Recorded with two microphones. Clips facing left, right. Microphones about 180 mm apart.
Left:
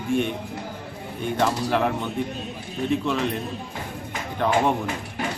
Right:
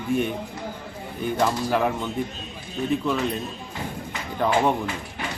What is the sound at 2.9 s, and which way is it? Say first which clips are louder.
Speech: even; 5° right (ahead or behind).